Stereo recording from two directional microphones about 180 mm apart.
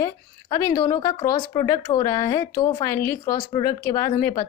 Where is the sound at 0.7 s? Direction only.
20° left (ahead or behind).